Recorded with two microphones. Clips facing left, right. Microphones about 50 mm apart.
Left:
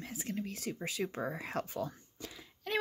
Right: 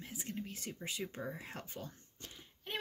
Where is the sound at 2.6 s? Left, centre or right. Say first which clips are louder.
Left 8 dB; left.